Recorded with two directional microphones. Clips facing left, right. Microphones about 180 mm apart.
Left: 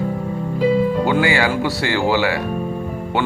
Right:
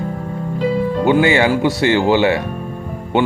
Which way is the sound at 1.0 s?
20° right (ahead or behind).